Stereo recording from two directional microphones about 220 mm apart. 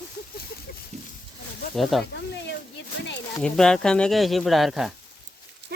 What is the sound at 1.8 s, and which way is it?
Speech, centre (ahead or behind).